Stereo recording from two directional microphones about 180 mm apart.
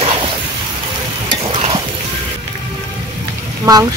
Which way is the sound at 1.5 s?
30° right (ahead or behind).